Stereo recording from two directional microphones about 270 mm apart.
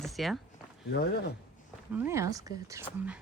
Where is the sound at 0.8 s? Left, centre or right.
Left.